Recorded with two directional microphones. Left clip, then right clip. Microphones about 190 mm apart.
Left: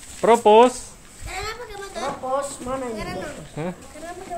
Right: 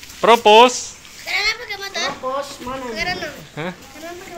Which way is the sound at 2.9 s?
45° left (ahead or behind).